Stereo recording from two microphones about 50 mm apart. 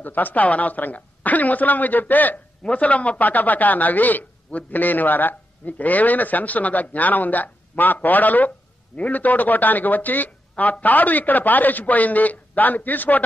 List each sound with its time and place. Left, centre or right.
0.0 s a man's voice: left
2.6 s a man's voice: left